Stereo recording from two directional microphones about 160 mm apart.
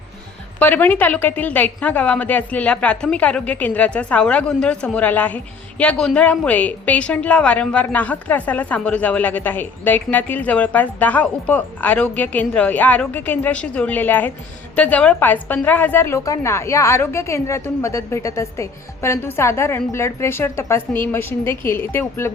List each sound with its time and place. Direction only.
0.6 s a woman's voice: 10° left (ahead or behind)